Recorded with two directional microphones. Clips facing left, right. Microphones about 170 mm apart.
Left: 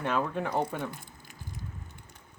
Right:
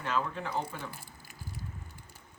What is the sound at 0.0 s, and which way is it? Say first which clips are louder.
Speech: left 4 dB; 55° left (ahead or behind).